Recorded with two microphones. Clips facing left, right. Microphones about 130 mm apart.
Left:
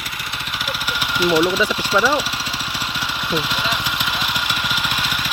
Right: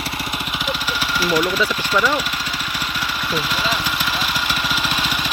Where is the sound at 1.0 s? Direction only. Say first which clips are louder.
Left 4 dB; 20° left (ahead or behind).